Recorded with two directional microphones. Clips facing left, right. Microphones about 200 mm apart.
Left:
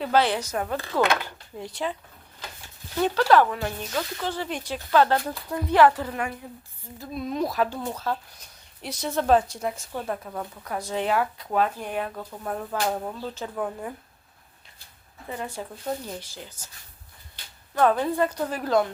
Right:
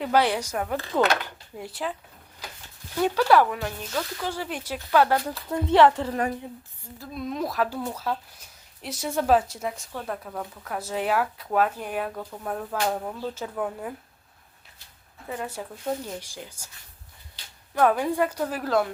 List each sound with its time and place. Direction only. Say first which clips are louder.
0.0 s a woman's voice: even; 10° right (ahead or behind)
3.0 s a woman's voice: even; 10° right (ahead or behind)
3.6 s speech: left 1 dB; 5° left (ahead or behind)
4.2 s a woman's voice: left 1 dB; 10° right (ahead or behind)
5.5 s a woman's voice: right 1 dB; 25° right (ahead or behind)
7.1 s speech: left 2 dB; centre (ahead or behind)
15.3 s speech: even; 5° right (ahead or behind)
16.2 s a woman's voice: right 1 dB; 10° right (ahead or behind)
17.7 s a woman's voice: even; 10° right (ahead or behind)